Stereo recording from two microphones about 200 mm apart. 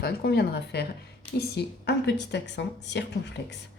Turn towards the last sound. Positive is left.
turn(degrees=60)  # may be behind; listen again after turning